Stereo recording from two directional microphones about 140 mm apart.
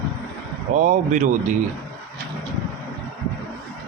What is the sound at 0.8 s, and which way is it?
Speech, 65° right (ahead or behind).